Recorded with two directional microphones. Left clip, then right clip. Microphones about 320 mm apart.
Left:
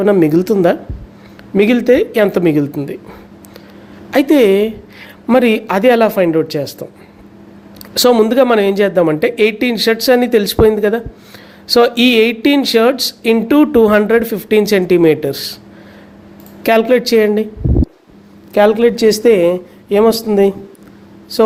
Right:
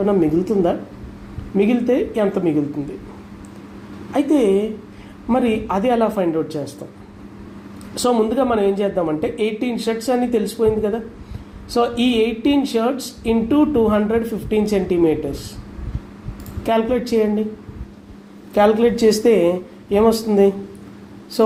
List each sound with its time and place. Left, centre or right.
0.0 s speech: left
4.1 s speech: left
7.9 s speech: left
16.6 s speech: left
18.5 s speech: left